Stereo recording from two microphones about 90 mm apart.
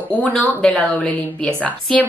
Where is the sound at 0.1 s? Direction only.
15° left (ahead or behind).